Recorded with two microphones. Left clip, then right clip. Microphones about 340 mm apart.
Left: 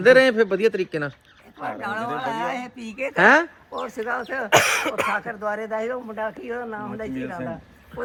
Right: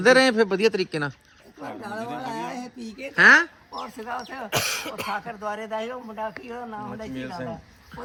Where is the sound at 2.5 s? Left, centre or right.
Centre.